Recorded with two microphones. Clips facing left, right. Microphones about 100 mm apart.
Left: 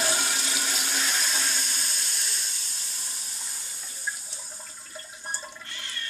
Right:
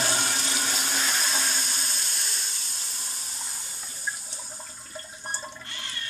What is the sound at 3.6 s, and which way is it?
Water, 15° right (ahead or behind).